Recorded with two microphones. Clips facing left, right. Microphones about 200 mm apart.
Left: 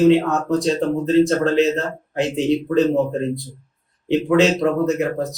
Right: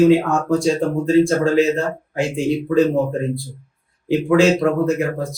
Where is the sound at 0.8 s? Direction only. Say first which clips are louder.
Even; 20° left (ahead or behind).